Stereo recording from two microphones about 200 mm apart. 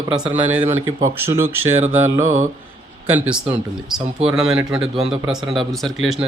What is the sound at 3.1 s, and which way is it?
Speech, 5° right (ahead or behind).